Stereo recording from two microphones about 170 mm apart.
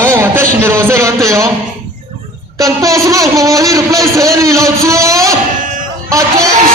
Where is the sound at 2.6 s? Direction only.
20° right (ahead or behind).